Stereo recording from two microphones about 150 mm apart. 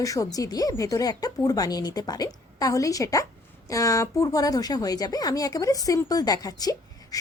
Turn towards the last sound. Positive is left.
turn(degrees=25)  # may be behind; listen again after turning